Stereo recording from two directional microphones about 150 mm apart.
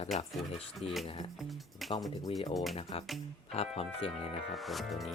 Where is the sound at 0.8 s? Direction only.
40° left (ahead or behind).